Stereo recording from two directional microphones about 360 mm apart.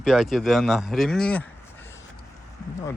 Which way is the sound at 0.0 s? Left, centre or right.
Centre.